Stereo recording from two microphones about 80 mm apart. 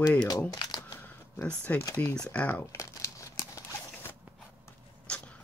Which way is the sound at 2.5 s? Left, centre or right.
Left.